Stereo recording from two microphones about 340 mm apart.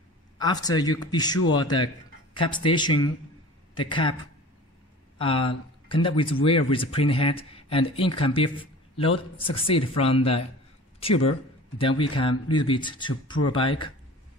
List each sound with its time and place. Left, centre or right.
0.4 s speech: centre
5.2 s speech: centre
11.8 s speech: centre